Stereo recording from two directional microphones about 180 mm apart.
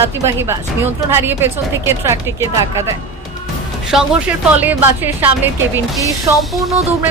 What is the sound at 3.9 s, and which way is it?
Speech, 5° right (ahead or behind).